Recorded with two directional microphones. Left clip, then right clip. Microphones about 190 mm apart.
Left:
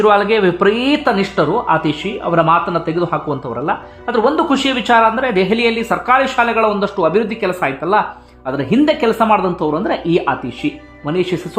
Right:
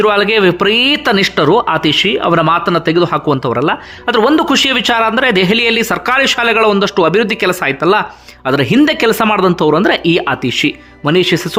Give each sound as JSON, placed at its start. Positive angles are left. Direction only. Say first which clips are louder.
{"t": 0.0, "sound": "speech", "louder": "right 2 dB", "side_deg": -20}